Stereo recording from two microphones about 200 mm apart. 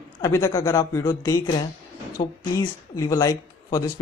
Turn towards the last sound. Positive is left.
turn(degrees=15)  # may be behind; listen again after turning